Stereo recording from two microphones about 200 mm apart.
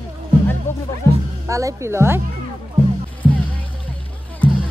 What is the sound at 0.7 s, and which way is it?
Music, 10° left (ahead or behind).